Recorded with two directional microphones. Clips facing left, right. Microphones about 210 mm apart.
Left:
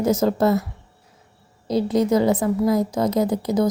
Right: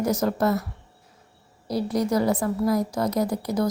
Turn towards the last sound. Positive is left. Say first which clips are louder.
# left 4 dB
turn(degrees=20)  # may be behind; listen again after turning